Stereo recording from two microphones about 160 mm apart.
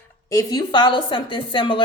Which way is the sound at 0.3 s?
25° left (ahead or behind).